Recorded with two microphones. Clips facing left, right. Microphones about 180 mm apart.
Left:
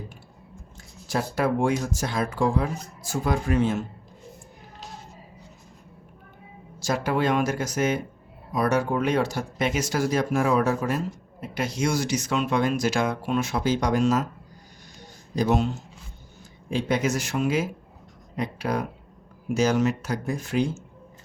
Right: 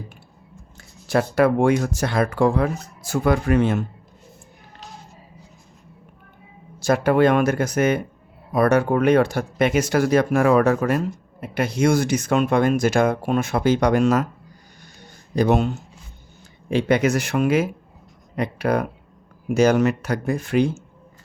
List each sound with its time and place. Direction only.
0.8 s speech: 65° right (ahead or behind)
6.8 s speech: 55° right (ahead or behind)
15.4 s speech: 60° right (ahead or behind)